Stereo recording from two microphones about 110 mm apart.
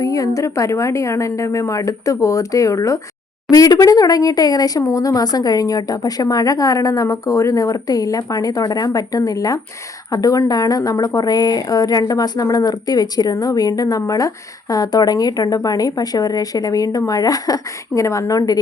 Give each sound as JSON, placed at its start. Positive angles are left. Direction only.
{"t": 0.0, "sound": "a woman's voice", "side_deg": 30}